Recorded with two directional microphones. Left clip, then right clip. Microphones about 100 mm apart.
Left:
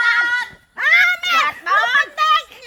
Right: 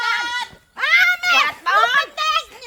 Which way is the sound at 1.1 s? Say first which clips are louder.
Right 1 dB; 15° right (ahead or behind).